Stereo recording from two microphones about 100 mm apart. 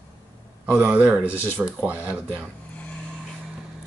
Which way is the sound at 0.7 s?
15° right (ahead or behind).